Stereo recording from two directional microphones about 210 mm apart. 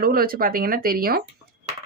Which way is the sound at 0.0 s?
45° right (ahead or behind).